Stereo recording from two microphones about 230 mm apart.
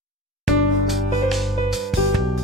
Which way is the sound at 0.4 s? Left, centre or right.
Centre.